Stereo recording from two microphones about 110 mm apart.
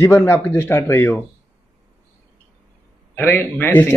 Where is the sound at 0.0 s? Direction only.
20° left (ahead or behind).